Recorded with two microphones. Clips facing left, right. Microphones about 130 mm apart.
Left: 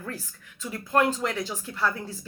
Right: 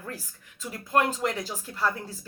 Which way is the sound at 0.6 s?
35° right (ahead or behind).